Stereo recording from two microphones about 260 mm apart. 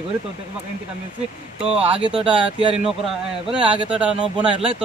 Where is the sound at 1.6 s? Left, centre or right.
Right.